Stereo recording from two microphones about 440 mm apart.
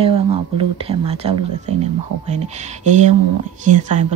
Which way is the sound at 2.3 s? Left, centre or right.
Centre.